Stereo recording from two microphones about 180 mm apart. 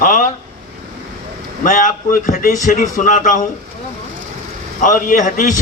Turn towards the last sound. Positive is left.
turn(degrees=45)  # may be behind; listen again after turning